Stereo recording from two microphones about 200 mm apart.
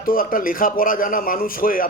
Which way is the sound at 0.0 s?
45° left (ahead or behind).